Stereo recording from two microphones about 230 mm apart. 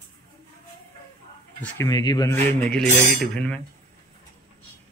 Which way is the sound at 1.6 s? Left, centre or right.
Centre.